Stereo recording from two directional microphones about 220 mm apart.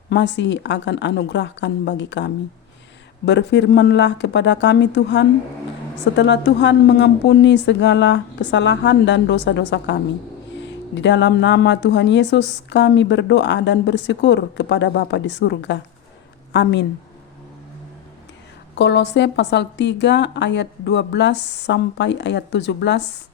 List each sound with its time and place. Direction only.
0.1 s speech: 55° left (ahead or behind)
18.8 s speech: 50° left (ahead or behind)